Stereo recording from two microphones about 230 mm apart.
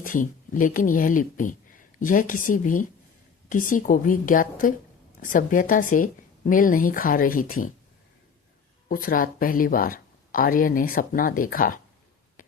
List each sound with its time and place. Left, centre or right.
0.0 s speech: left
8.9 s speech: left
12.4 s a sound: left